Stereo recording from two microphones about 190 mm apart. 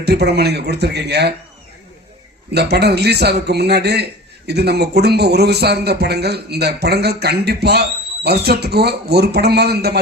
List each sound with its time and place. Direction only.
0.0 s a man's voice: 60° right (ahead or behind)
2.5 s a man's voice: 60° right (ahead or behind)